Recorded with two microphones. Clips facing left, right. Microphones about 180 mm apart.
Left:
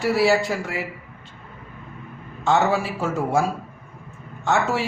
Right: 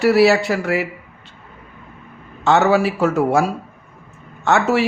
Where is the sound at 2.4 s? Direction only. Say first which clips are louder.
Right 5 dB; 70° right (ahead or behind).